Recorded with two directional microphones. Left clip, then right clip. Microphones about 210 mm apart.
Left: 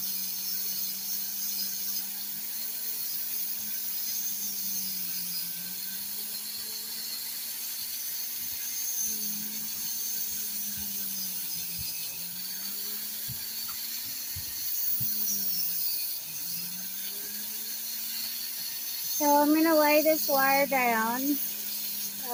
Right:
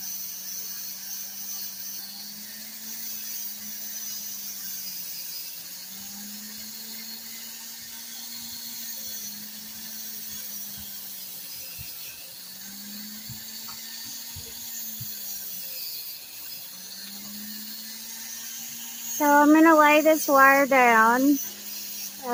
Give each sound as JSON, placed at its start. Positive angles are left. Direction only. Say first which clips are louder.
{"t": 19.2, "sound": "speech", "louder": "right 6 dB", "side_deg": -30}